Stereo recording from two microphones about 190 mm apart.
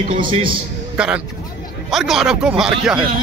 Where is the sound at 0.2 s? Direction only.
25° right (ahead or behind).